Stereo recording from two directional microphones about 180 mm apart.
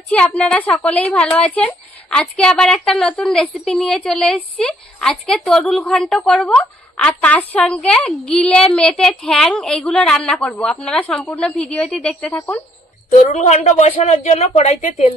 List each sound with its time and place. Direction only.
0.1 s a woman's voice: 5° left (ahead or behind)
13.1 s speech: 40° left (ahead or behind)